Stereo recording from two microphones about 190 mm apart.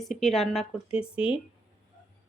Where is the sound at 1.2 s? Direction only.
25° left (ahead or behind).